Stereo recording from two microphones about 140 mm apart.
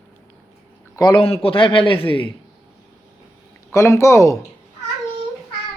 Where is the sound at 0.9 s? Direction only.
35° left (ahead or behind).